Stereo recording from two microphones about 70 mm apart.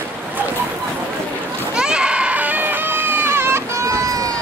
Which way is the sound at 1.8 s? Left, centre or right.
Centre.